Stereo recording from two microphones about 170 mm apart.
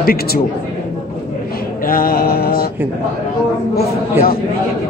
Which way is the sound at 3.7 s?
65° left (ahead or behind).